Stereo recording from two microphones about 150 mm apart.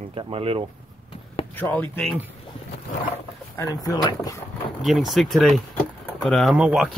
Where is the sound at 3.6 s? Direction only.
25° left (ahead or behind).